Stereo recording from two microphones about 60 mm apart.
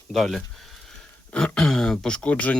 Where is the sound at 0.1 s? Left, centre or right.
Centre; by 2.6 s left.